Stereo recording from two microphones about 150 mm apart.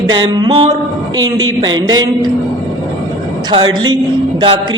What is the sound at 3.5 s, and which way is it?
Speech, 30° right (ahead or behind).